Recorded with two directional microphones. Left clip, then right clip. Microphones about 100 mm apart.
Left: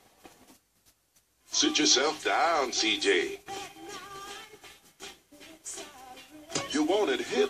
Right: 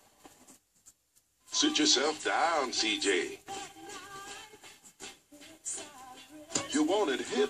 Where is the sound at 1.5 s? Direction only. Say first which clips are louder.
Left 2 dB; 25° left (ahead or behind).